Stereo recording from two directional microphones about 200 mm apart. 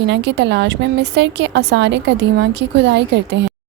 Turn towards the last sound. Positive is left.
turn(degrees=-60)  # may be behind; listen again after turning